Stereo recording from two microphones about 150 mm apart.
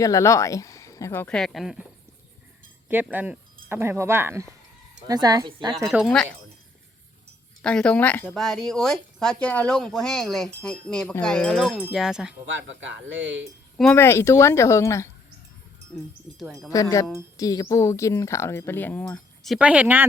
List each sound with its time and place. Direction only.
0.0 s speech: 20° left (ahead or behind)
1.3 s speech: 5° left (ahead or behind)
2.9 s speech: 10° right (ahead or behind); by 5.7 s 30° right (ahead or behind)
5.9 s speech: 10° right (ahead or behind)
7.6 s speech: 5° left (ahead or behind)
13.9 s speech: 15° left (ahead or behind)
16.3 s speech: centre (ahead or behind)
16.6 s speech: 20° left (ahead or behind); by 19.5 s 5° left (ahead or behind)
19.5 s speech: 10° right (ahead or behind)